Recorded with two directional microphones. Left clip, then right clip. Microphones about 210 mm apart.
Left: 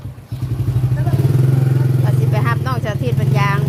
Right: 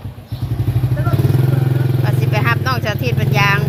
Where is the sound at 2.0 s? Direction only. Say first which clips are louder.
Right 4 dB; 20° left (ahead or behind).